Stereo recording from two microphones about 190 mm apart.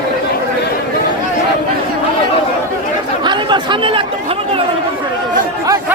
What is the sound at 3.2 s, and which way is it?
Chatter, 25° right (ahead or behind).